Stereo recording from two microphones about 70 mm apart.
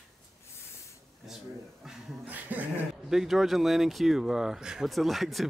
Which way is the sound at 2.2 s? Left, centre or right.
Right.